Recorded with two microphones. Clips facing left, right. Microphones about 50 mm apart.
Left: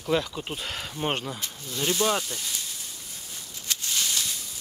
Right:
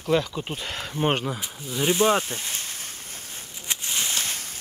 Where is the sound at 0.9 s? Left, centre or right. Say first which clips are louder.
Right 6 dB; right.